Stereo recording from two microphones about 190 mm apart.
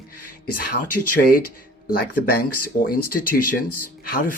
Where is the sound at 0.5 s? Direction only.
50° left (ahead or behind).